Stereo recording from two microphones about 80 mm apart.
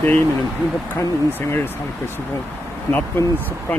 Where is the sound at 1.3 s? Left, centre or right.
Left.